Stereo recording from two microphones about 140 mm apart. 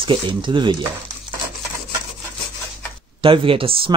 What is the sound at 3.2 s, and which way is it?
Speech, 40° right (ahead or behind).